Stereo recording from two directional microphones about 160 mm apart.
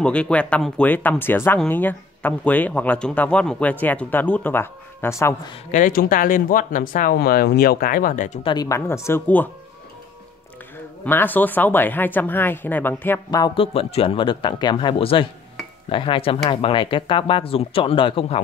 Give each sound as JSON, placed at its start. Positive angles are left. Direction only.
{"t": 0.0, "sound": "speech", "side_deg": 5}
{"t": 5.7, "sound": "speech", "side_deg": 55}
{"t": 8.5, "sound": "speech", "side_deg": 20}
{"t": 11.1, "sound": "speech", "side_deg": 10}
{"t": 13.6, "sound": "speech", "side_deg": 40}